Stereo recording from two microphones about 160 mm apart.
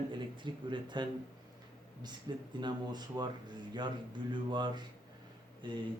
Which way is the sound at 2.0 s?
30° right (ahead or behind).